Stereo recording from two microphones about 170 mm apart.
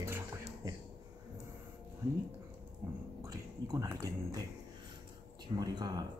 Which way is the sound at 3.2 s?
20° right (ahead or behind).